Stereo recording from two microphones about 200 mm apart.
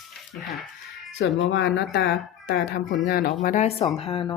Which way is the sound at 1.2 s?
65° left (ahead or behind).